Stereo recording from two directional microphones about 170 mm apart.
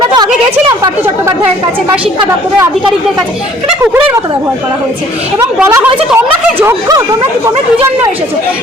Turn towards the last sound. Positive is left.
turn(degrees=-20)  # may be behind; listen again after turning